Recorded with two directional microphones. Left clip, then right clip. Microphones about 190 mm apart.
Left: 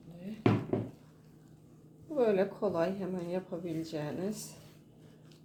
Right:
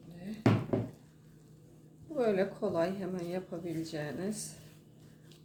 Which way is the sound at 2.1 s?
20° left (ahead or behind).